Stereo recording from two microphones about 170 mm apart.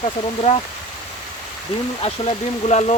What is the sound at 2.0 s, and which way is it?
Speech, 35° left (ahead or behind).